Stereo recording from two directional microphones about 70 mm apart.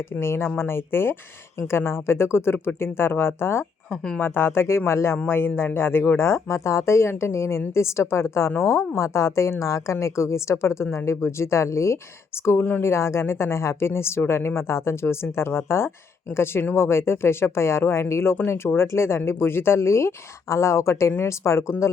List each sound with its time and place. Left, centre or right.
0.2 s speech: left
3.8 s speech: centre
4.2 s a woman's voice: left
12.5 s a woman's voice: left
12.9 s a woman's voice: left